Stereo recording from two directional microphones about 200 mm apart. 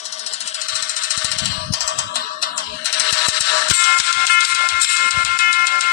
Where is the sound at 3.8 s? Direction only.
50° left (ahead or behind).